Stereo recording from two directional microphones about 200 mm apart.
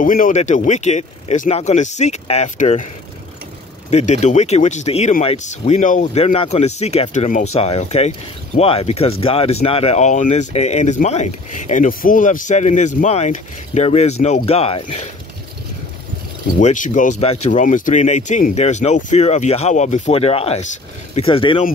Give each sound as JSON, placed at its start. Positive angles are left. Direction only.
{"t": 0.0, "sound": "speech", "side_deg": 40}
{"t": 3.9, "sound": "speech", "side_deg": 35}
{"t": 16.5, "sound": "speech", "side_deg": 40}